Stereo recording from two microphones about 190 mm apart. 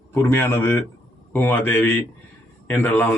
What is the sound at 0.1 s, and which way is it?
Speech, 10° left (ahead or behind).